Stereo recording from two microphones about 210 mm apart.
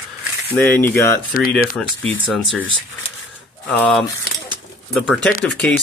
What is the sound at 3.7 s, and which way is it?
Speech, 5° left (ahead or behind).